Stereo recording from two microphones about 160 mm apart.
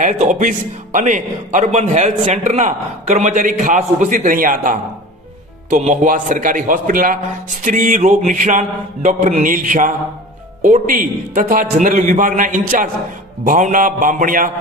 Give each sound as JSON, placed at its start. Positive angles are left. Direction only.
{"t": 0.0, "sound": "a man's voice", "side_deg": -50}